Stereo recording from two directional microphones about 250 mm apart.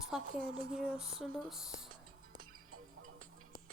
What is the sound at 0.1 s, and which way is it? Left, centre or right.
Speech, centre.